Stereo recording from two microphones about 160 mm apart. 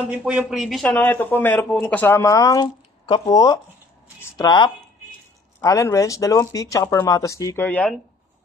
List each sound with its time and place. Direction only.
0.2 s speech: 5° right (ahead or behind)
0.8 s speech: 10° left (ahead or behind)